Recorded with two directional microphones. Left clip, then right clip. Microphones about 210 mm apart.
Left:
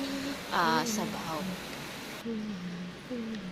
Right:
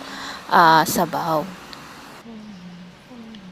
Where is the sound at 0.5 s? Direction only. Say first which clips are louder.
Right 15 dB; 35° right (ahead or behind).